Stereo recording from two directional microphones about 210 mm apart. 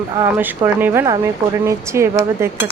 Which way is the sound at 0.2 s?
10° right (ahead or behind).